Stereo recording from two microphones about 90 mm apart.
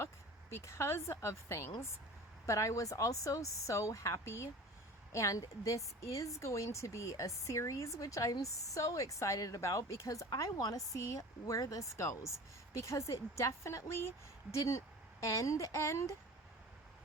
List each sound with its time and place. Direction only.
0.5 s a woman's voice: 30° left (ahead or behind)
15.2 s a woman's voice: 35° left (ahead or behind)